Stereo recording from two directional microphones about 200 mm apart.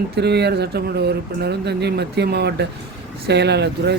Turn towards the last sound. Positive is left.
turn(degrees=-55)  # may be behind; listen again after turning